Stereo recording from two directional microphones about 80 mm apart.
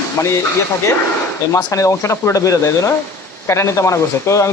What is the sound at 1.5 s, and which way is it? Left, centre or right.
Speech, left.